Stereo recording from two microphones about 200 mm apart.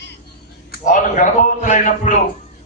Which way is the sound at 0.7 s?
40° left (ahead or behind).